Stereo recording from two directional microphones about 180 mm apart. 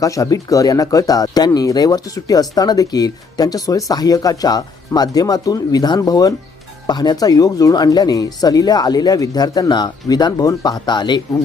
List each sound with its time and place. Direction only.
0.0 s speech: 20° left (ahead or behind)